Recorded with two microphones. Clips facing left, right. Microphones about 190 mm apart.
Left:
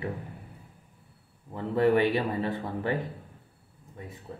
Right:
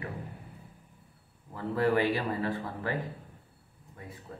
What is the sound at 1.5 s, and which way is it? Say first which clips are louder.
Speech: left 4 dB; 25° left (ahead or behind).